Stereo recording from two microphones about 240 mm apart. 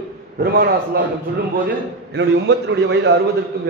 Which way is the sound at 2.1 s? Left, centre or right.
Right.